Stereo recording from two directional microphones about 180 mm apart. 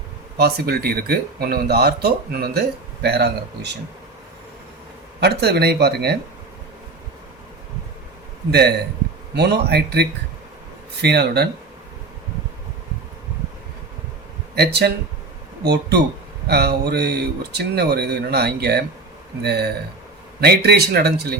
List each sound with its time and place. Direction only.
0.3 s speech: 60° right (ahead or behind)
5.2 s speech: 65° right (ahead or behind)
8.4 s speech: 65° right (ahead or behind)
14.5 s speech: 65° right (ahead or behind)